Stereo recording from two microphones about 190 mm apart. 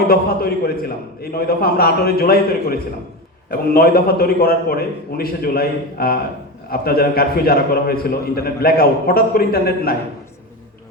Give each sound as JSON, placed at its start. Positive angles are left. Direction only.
{"t": 0.1, "sound": "a man's voice", "side_deg": 55}